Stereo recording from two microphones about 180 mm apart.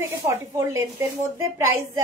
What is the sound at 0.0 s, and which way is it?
A woman's voice, 15° right (ahead or behind).